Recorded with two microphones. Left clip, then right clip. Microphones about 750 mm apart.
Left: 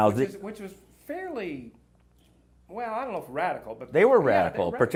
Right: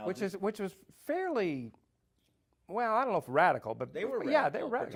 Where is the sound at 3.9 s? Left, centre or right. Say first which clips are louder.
Left 19 dB; left.